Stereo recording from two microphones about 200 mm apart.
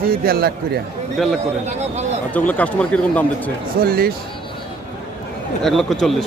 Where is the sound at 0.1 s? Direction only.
50° right (ahead or behind).